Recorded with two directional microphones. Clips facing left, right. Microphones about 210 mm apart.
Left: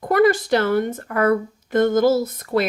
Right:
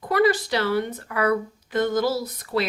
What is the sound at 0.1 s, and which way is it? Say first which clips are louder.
Speech: left 4 dB; 50° left (ahead or behind).